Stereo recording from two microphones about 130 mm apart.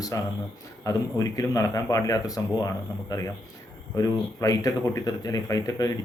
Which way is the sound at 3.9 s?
25° left (ahead or behind).